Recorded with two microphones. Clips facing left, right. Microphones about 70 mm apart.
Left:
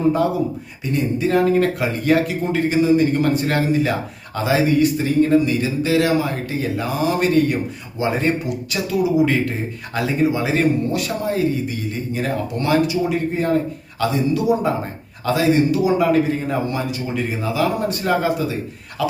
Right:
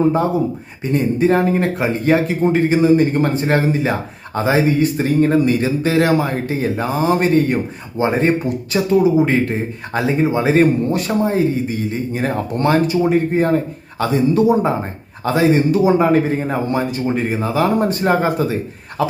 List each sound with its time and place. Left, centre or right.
0.9 s a man's voice: right